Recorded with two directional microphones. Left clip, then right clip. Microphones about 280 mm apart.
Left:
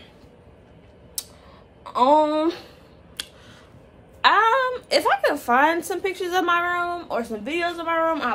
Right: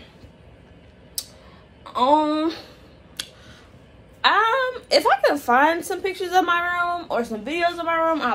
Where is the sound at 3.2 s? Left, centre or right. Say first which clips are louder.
Right 1 dB; centre.